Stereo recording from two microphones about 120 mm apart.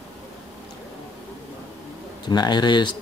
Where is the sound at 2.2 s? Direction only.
35° left (ahead or behind).